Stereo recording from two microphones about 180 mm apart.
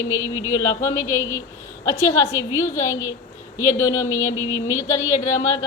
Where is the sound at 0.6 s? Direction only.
20° left (ahead or behind).